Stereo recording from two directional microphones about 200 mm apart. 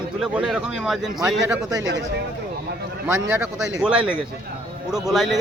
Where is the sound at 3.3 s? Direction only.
10° right (ahead or behind).